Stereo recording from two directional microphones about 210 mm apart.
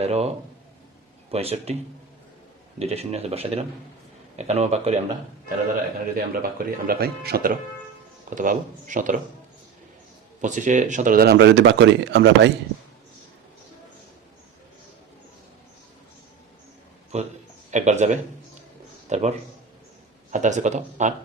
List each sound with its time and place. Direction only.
0.0 s speech: 30° right (ahead or behind)
1.3 s speech: 30° right (ahead or behind)
6.1 s speech: 45° right (ahead or behind)
10.4 s speech: 35° right (ahead or behind); by 12.5 s 55° right (ahead or behind)
17.1 s speech: 30° right (ahead or behind)
20.3 s speech: 35° right (ahead or behind)